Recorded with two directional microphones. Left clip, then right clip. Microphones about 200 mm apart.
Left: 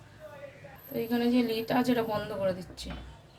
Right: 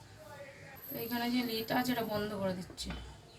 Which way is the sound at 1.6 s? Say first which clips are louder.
Left 6 dB; 45° left (ahead or behind).